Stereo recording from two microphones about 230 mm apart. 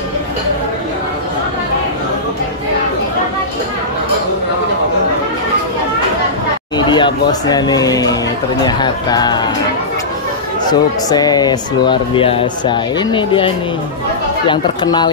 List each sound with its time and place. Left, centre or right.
6.8 s speech: centre
10.7 s speech: centre
14.5 s speech: centre